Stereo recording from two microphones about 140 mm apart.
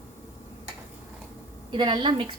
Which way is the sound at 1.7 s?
35° right (ahead or behind).